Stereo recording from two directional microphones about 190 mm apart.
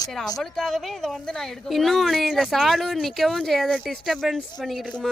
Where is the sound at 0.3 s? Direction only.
Centre (ahead or behind).